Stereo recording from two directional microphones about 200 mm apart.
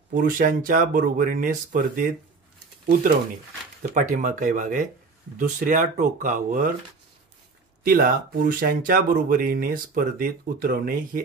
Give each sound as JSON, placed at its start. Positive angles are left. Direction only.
{"t": 0.1, "sound": "speech", "side_deg": -45}
{"t": 3.9, "sound": "speech", "side_deg": -40}
{"t": 7.8, "sound": "speech", "side_deg": -45}